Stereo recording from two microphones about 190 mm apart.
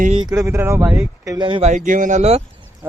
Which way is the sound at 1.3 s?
25° right (ahead or behind).